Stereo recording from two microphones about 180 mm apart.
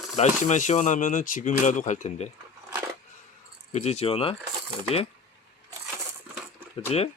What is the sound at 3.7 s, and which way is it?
Speech, 40° left (ahead or behind).